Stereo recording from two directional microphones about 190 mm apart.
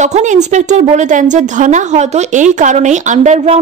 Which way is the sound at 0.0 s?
40° right (ahead or behind).